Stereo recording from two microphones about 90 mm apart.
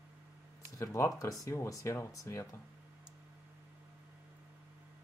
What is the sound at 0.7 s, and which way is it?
Speech, 30° left (ahead or behind).